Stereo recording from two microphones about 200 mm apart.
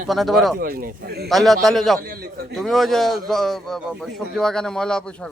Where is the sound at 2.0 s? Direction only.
45° right (ahead or behind).